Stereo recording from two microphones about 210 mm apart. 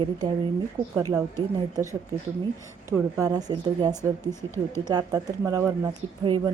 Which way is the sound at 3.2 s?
15° right (ahead or behind).